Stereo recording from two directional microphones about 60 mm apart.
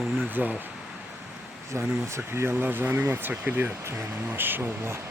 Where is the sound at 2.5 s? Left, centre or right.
Right.